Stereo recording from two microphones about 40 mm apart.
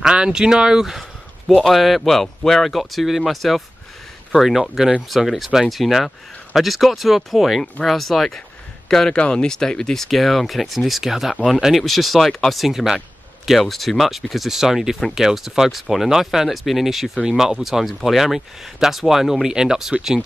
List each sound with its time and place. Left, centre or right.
0.0 s speech: right
1.7 s speech: centre
10.0 s speech: centre
17.2 s speech: centre